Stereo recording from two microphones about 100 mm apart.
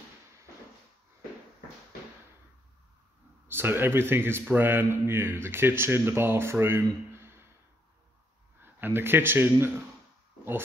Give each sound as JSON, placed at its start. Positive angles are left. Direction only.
{"t": 3.4, "sound": "speech", "side_deg": -20}
{"t": 8.5, "sound": "a man's voice", "side_deg": -20}